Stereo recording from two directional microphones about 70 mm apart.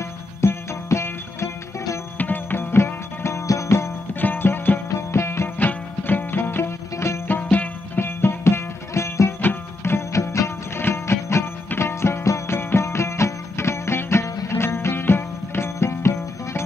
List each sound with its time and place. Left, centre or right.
0.4 s music: left
2.1 s music: left
4.1 s music: left
4.8 s music: left
5.6 s music: left
7.5 s music: left
9.4 s music: left